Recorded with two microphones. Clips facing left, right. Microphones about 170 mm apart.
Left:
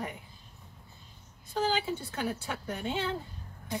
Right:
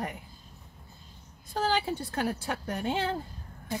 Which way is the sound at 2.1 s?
45° right (ahead or behind).